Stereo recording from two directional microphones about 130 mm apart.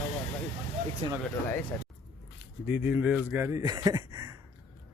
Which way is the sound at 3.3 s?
25° right (ahead or behind).